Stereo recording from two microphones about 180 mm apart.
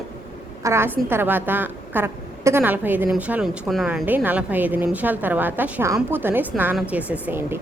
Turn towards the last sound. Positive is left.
turn(degrees=-10)  # may be behind; listen again after turning